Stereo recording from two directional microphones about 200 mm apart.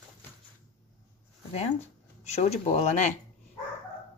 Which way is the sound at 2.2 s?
35° left (ahead or behind).